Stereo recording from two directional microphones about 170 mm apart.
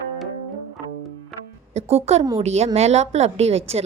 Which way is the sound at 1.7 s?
35° right (ahead or behind).